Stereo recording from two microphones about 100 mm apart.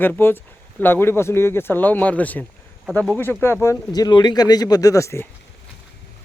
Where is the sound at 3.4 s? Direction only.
25° left (ahead or behind).